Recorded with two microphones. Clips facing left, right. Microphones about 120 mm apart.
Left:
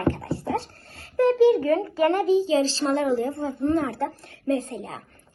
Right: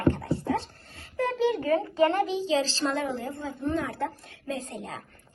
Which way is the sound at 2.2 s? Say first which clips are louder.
Left 6 dB; 40° left (ahead or behind).